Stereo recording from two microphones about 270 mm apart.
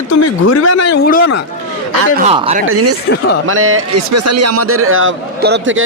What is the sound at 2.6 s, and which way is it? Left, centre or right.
A man's voice, right.